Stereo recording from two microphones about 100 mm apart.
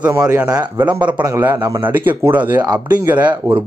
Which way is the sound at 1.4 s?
30° right (ahead or behind).